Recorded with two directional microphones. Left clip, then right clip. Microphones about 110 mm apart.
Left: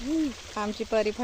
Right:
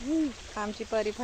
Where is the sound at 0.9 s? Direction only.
90° left.